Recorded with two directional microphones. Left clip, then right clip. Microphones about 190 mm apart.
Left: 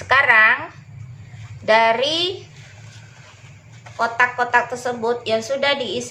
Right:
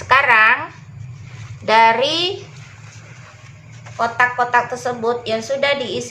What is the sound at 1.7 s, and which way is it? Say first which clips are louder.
Speech: right 3 dB; 5° right (ahead or behind).